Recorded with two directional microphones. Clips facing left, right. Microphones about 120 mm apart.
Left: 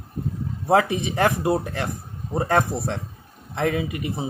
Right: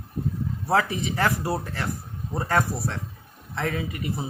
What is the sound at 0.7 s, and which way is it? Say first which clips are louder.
Speech: left 4 dB; 20° left (ahead or behind).